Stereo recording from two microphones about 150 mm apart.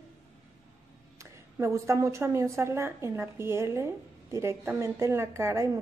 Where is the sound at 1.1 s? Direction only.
20° right (ahead or behind).